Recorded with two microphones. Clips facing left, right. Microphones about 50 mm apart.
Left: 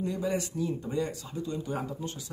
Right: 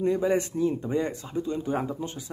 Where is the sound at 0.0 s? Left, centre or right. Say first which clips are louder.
Right 7 dB; right.